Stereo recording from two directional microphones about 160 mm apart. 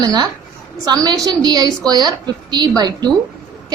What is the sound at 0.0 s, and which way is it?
A woman's voice, 25° right (ahead or behind).